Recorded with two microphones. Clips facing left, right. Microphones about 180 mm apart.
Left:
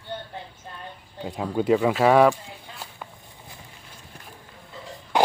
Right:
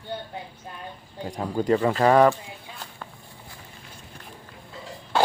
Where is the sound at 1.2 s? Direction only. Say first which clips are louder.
Left 1 dB; 5° left (ahead or behind).